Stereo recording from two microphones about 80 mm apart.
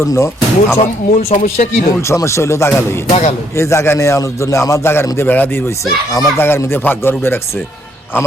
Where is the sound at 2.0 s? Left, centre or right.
Left.